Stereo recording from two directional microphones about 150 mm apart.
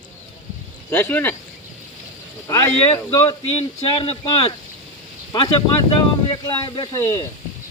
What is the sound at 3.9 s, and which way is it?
Speech, 35° left (ahead or behind).